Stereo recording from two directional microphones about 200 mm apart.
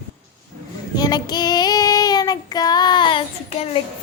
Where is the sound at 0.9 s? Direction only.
20° left (ahead or behind).